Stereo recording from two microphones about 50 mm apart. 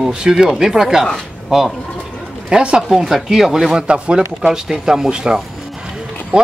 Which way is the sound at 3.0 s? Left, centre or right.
Centre.